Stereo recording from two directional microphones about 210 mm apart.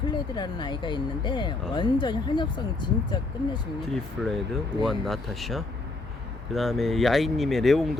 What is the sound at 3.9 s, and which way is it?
Speech, centre (ahead or behind).